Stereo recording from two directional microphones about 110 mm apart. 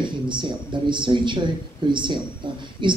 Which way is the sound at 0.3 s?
45° right (ahead or behind).